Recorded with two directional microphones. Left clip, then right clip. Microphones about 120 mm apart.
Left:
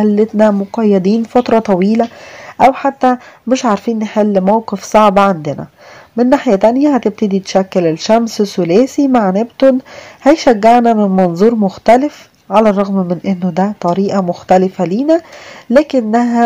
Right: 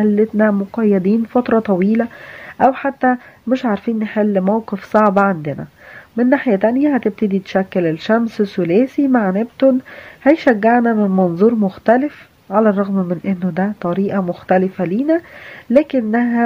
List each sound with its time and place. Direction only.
0.0 s speech: 40° left (ahead or behind)